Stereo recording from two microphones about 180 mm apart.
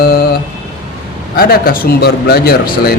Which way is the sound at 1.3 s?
55° left (ahead or behind).